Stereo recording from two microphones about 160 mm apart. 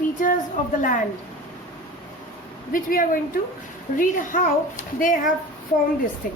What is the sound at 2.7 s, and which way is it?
A woman's voice, 60° left (ahead or behind).